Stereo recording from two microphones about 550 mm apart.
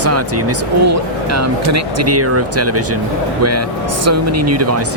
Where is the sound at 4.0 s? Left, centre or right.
Right.